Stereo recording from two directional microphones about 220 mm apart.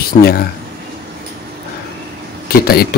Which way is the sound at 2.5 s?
45° left (ahead or behind).